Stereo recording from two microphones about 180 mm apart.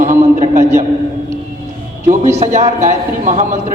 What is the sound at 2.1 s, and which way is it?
A man's voice, 40° right (ahead or behind).